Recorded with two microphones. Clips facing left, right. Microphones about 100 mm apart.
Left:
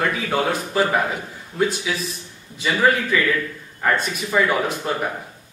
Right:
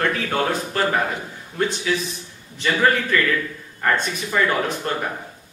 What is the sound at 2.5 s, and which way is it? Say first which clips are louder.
A man's voice: even; 5° left (ahead or behind).